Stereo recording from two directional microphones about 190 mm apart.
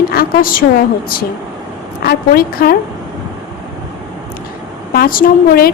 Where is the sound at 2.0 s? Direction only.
55° left (ahead or behind).